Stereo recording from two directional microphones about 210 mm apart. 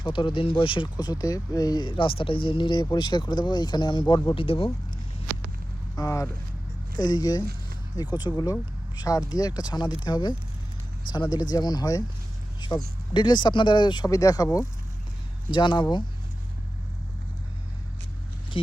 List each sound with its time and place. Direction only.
0.0 s speech: 25° left (ahead or behind)
6.0 s speech: 15° left (ahead or behind)
12.5 s vehicle: 20° left (ahead or behind)
13.1 s speech: 20° left (ahead or behind)
18.5 s speech: 25° left (ahead or behind)